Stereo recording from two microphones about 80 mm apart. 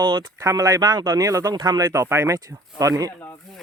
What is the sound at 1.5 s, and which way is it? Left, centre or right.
Speech, right.